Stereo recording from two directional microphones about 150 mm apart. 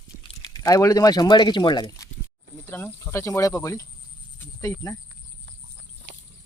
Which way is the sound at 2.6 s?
15° left (ahead or behind).